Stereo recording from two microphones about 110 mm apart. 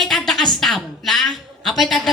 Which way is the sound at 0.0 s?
5° left (ahead or behind).